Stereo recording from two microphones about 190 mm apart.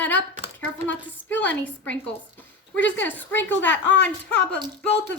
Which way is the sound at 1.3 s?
10° left (ahead or behind).